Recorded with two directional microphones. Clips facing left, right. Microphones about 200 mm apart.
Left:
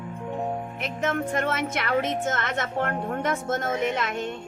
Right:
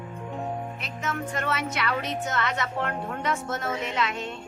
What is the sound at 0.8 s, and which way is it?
A woman's voice, 50° left (ahead or behind).